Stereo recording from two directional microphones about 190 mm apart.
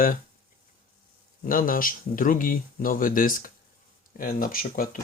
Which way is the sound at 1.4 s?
45° left (ahead or behind).